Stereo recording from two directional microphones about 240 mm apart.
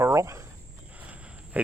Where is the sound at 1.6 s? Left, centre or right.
Centre.